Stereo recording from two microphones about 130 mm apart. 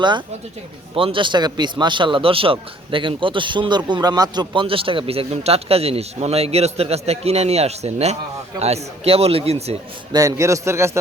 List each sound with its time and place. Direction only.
0.9 s a man's voice: 40° right (ahead or behind)
10.1 s a man's voice: 25° right (ahead or behind)